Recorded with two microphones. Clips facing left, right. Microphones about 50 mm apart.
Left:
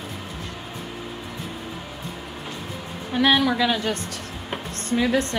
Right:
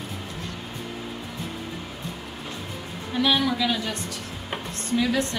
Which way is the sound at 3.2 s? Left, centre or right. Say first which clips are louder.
Left 4 dB; left.